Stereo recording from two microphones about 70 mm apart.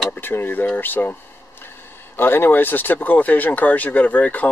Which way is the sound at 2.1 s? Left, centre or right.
Left.